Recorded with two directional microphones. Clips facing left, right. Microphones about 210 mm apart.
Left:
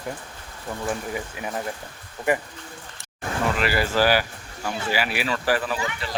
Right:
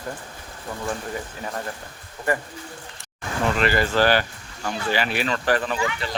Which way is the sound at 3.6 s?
5° left (ahead or behind).